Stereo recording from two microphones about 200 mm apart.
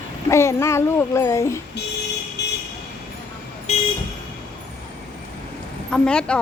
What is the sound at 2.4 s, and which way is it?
Vehicle, 60° left (ahead or behind).